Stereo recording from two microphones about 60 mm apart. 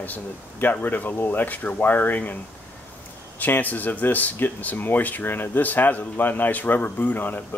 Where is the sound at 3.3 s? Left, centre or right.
Left.